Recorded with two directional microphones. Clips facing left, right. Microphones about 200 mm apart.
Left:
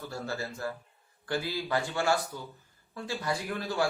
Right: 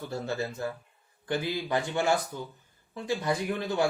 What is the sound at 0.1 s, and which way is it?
A man's voice, 20° right (ahead or behind).